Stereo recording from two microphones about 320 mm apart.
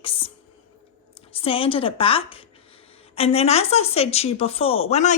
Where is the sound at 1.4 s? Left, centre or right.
Centre.